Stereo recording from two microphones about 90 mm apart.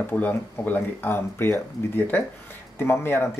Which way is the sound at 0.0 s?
20° left (ahead or behind).